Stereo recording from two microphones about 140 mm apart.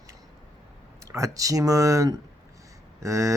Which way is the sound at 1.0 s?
20° right (ahead or behind).